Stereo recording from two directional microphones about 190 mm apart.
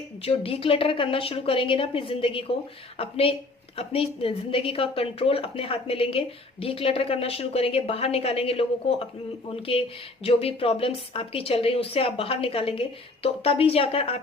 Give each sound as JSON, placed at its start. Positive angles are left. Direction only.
{"t": 0.2, "sound": "a woman's voice", "side_deg": 30}
{"t": 10.2, "sound": "a woman's voice", "side_deg": 30}